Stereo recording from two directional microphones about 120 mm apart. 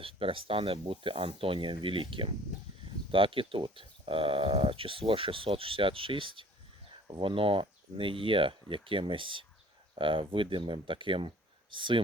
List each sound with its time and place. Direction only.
0.0 s speech: 50° right (ahead or behind)